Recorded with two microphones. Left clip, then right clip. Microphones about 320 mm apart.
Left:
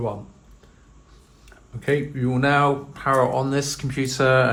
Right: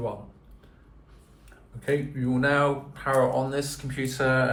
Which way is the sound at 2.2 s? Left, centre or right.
Centre.